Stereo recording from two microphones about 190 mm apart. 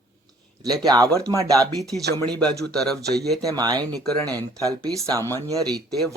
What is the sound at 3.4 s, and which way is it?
Speech, 20° right (ahead or behind).